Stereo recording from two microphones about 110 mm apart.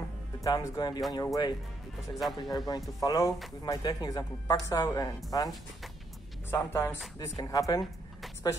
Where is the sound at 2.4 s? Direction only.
35° left (ahead or behind).